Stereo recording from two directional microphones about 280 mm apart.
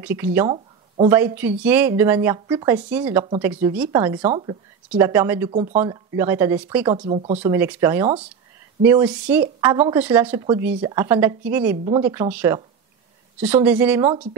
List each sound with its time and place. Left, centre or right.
0.0 s speech: centre
4.8 s speech: centre
5.5 s speech: right
5.8 s speech: centre
7.1 s speech: right
7.3 s speech: centre